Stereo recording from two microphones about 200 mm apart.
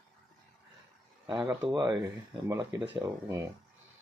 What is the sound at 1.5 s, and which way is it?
Speech, 20° right (ahead or behind).